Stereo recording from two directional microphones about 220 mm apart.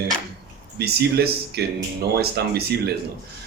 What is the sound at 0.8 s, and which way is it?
Speech, 45° right (ahead or behind).